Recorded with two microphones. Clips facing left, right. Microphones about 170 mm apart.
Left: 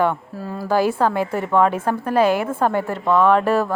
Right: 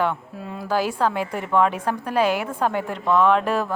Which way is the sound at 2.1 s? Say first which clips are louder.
Left 4 dB; 50° left (ahead or behind).